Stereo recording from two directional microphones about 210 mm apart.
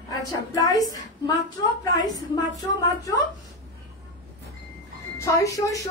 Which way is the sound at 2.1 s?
15° left (ahead or behind).